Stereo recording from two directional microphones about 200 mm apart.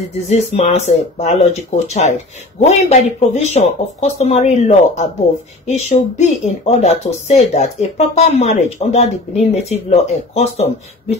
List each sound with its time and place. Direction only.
0.3 s speech: 30° left (ahead or behind)